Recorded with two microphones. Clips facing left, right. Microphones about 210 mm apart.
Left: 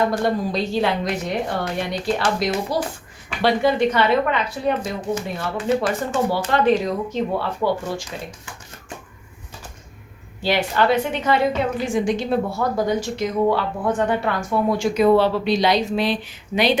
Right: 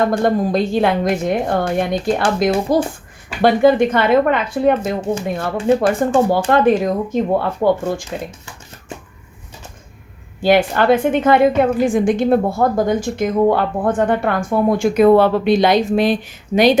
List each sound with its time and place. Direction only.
0.0 s a woman's voice: 50° right (ahead or behind)
10.4 s a woman's voice: 50° right (ahead or behind)